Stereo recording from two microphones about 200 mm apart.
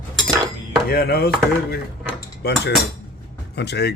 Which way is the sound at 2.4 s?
55° left (ahead or behind).